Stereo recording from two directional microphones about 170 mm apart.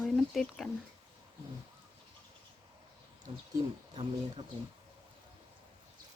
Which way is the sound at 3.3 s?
35° right (ahead or behind).